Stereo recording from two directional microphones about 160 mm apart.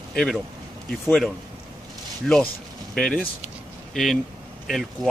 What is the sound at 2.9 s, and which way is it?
Speech, 5° left (ahead or behind).